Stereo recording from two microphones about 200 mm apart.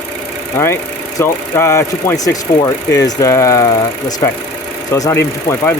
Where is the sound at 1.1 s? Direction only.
15° left (ahead or behind).